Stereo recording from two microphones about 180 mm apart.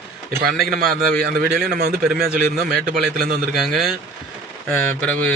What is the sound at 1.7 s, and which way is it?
Speech, 55° right (ahead or behind).